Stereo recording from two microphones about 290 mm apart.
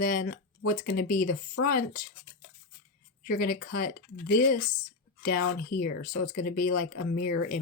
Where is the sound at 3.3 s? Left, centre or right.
Left.